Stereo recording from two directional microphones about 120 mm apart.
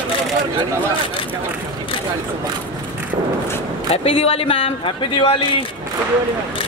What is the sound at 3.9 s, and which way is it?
A man's voice, 50° left (ahead or behind).